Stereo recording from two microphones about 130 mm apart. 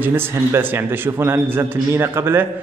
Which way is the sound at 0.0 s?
15° right (ahead or behind).